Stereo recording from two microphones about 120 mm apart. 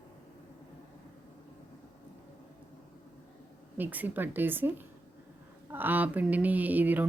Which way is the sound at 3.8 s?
15° right (ahead or behind).